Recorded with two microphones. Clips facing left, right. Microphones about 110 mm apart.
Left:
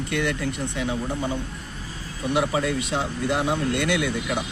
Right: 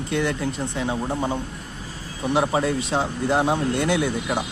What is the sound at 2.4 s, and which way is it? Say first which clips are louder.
Speech: right 2 dB; 30° right (ahead or behind).